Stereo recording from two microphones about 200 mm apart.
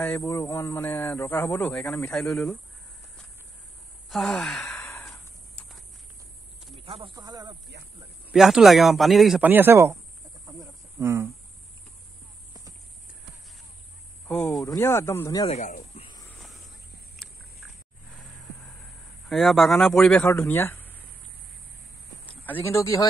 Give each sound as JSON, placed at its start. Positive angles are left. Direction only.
{"t": 0.0, "sound": "speech", "side_deg": 10}
{"t": 4.1, "sound": "sigh", "side_deg": 0}
{"t": 6.8, "sound": "speech", "side_deg": -25}
{"t": 7.7, "sound": "a sound", "side_deg": -60}
{"t": 8.3, "sound": "speech", "side_deg": 0}
{"t": 10.4, "sound": "a sound", "side_deg": -15}
{"t": 14.2, "sound": "speech", "side_deg": 5}
{"t": 15.4, "sound": "speech", "side_deg": 35}
{"t": 16.3, "sound": "a sound", "side_deg": 0}
{"t": 19.2, "sound": "speech", "side_deg": 0}
{"t": 22.4, "sound": "speech", "side_deg": 10}